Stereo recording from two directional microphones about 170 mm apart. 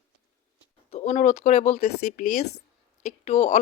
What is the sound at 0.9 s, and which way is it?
A woman's voice, 40° left (ahead or behind).